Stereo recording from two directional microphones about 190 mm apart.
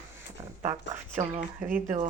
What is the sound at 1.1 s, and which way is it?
Speech, 40° right (ahead or behind).